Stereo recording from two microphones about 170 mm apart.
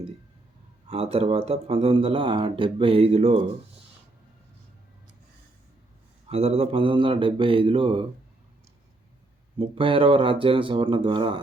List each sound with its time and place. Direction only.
0.9 s speech: 35° right (ahead or behind)
6.2 s speech: 35° right (ahead or behind)
9.6 s speech: 30° right (ahead or behind)